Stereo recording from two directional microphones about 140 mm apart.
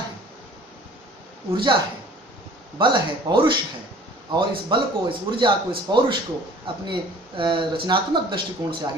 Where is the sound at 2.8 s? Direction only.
35° right (ahead or behind).